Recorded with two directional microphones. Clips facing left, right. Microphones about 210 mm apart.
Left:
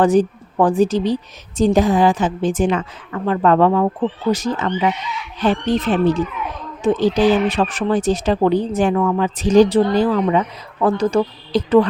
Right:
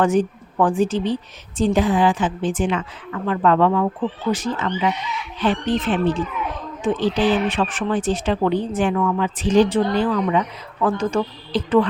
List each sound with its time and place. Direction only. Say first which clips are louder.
0.0 s speech: left 4 dB; 35° left (ahead or behind)